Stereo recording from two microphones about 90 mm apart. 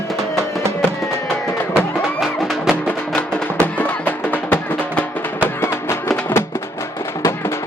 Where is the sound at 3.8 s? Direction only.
20° left (ahead or behind).